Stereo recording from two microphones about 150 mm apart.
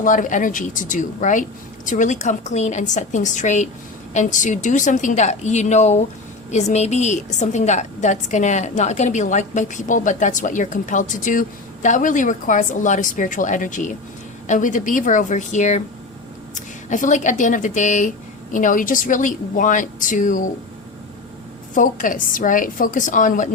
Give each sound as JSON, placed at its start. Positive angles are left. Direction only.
{"t": 0.0, "sound": "a woman's voice", "side_deg": 60}
{"t": 21.8, "sound": "a woman's voice", "side_deg": 60}